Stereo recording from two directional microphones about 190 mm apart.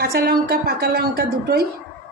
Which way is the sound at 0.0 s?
50° right (ahead or behind).